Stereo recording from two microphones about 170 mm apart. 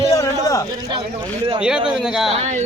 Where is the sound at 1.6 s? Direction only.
5° right (ahead or behind).